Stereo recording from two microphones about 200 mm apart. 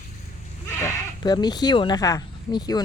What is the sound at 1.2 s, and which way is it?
Speech, 20° left (ahead or behind).